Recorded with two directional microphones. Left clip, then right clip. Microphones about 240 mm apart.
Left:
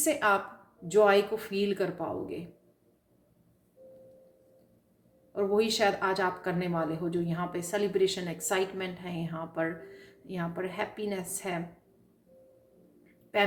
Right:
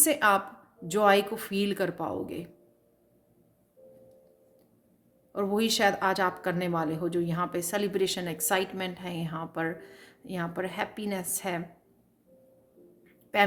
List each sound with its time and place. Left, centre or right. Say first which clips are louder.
0.0 s speech: right 2 dB; right
5.3 s speech: left 1 dB; right
13.3 s speech: right 3 dB; right